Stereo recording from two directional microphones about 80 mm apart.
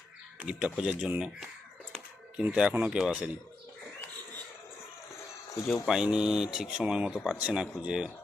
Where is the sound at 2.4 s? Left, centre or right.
Centre.